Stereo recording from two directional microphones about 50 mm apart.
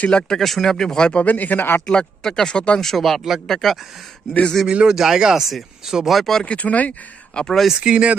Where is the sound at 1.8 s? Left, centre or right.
Centre.